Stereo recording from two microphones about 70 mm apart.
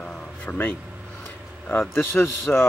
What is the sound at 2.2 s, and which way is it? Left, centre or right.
Speech, centre.